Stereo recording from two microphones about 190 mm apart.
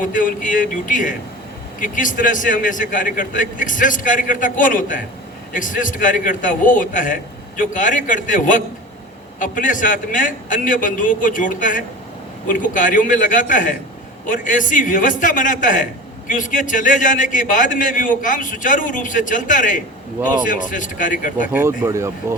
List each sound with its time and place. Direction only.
0.0 s a man's voice: 45° left (ahead or behind)
21.5 s speech: 10° right (ahead or behind)